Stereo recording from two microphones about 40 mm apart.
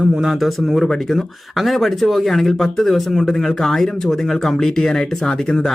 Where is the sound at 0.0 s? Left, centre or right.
Centre.